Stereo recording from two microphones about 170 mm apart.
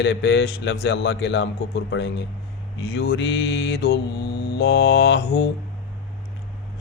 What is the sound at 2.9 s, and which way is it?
Speech, 75° left (ahead or behind).